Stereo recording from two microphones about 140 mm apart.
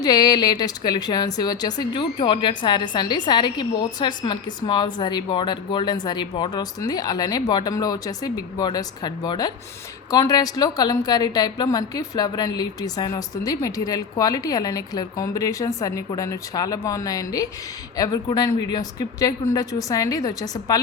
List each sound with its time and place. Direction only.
0.0 s a woman's voice: 30° left (ahead or behind)